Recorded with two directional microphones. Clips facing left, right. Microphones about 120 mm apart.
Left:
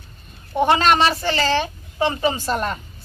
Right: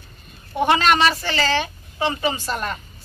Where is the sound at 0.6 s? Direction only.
35° left (ahead or behind).